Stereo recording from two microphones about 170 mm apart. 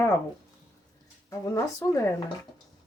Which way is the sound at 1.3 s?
20° left (ahead or behind).